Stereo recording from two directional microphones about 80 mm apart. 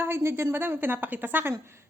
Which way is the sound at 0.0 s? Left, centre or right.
Right.